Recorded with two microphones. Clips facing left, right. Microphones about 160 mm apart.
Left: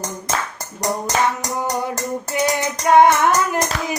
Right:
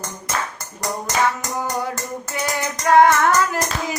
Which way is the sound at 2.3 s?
20° left (ahead or behind).